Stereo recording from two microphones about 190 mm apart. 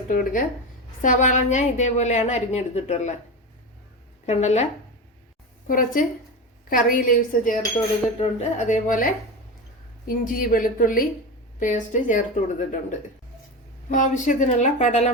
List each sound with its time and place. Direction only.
0.1 s a woman's voice: 45° left (ahead or behind)
4.3 s a woman's voice: 35° left (ahead or behind)
5.6 s a woman's voice: 45° left (ahead or behind)
10.2 s a woman's voice: 45° left (ahead or behind)
13.9 s a woman's voice: 40° left (ahead or behind)